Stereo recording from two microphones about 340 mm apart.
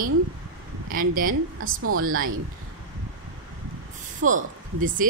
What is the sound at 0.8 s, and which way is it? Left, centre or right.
Speech, right.